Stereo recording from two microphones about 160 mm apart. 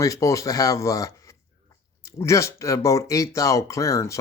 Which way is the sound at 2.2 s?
20° left (ahead or behind).